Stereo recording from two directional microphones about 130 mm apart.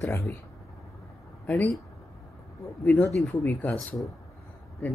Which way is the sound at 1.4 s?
10° left (ahead or behind).